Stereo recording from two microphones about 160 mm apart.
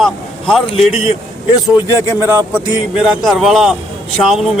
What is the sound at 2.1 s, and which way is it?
Speech, 15° right (ahead or behind).